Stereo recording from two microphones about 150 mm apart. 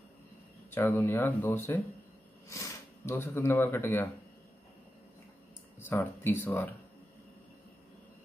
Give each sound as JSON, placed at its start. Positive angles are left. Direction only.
{"t": 0.7, "sound": "speech", "side_deg": 15}
{"t": 5.8, "sound": "speech", "side_deg": 15}